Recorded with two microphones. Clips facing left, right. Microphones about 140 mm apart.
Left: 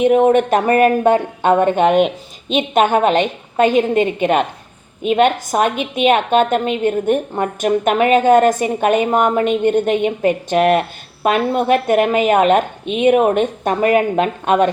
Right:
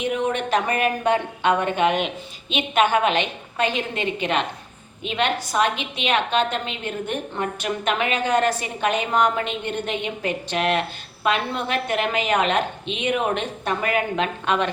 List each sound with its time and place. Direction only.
0.0 s a woman's voice: 45° left (ahead or behind)